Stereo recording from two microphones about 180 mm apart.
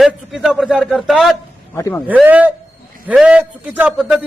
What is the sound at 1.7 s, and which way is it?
Speech, 15° left (ahead or behind).